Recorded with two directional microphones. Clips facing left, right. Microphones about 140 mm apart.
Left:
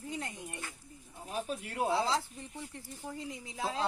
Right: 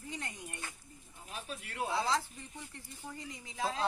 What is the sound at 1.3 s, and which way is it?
Speech, 40° left (ahead or behind).